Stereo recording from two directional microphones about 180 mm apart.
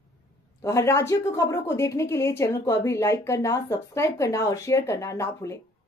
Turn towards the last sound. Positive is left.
turn(degrees=15)  # may be behind; listen again after turning